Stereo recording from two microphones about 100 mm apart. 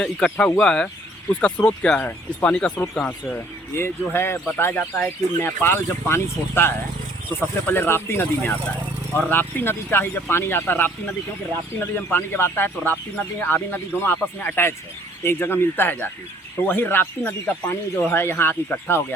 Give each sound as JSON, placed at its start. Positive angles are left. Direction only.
{"t": 0.0, "sound": "speech", "side_deg": 10}
{"t": 3.3, "sound": "speech", "side_deg": 25}